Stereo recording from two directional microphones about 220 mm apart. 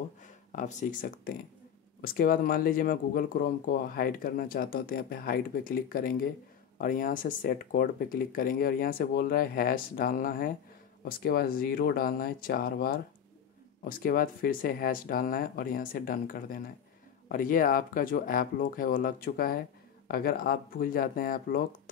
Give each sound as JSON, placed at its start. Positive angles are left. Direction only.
{"t": 0.6, "sound": "speech", "side_deg": 35}